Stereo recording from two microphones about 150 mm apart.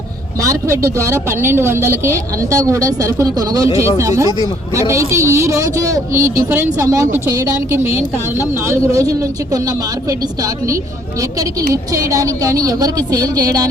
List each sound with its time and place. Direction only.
0.4 s speech: 20° right (ahead or behind)